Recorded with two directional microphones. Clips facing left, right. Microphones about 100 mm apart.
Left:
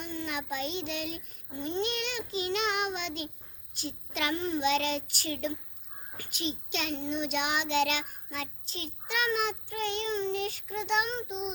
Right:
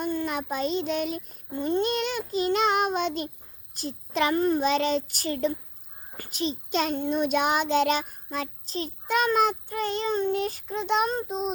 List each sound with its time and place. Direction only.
0.0 s a child's voice: 45° right (ahead or behind)